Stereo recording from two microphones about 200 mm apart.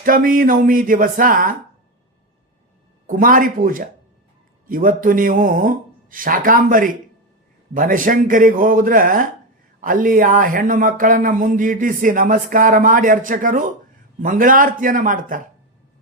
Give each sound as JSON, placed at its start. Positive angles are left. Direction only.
{"t": 0.0, "sound": "speech", "side_deg": -45}
{"t": 3.1, "sound": "speech", "side_deg": -45}